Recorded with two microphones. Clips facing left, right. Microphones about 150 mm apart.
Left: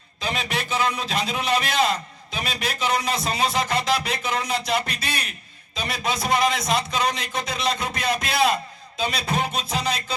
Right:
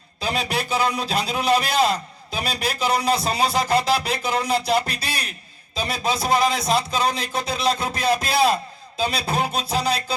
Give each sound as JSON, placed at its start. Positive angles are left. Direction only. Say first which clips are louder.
{"t": 0.2, "sound": "a man's voice", "louder": "right 3 dB", "side_deg": -40}